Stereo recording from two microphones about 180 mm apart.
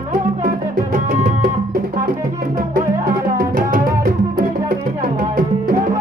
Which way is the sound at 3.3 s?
50° right (ahead or behind).